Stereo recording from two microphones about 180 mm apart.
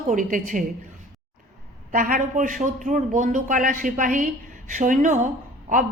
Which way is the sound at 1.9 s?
45° right (ahead or behind).